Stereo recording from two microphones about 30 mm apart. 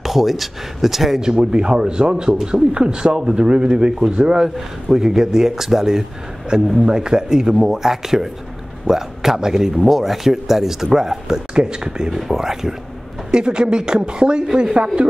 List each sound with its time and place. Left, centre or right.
0.0 s speech: centre
1.2 s a man's voice: right
6.5 s a man's voice: right
11.5 s a man's voice: right
12.1 s speech: centre
13.3 s a man's voice: right